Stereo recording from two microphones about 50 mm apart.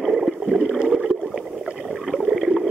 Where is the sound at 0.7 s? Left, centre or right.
Centre.